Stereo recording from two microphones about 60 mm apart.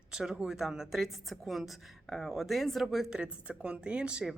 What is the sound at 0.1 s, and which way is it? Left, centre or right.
A woman's voice, centre.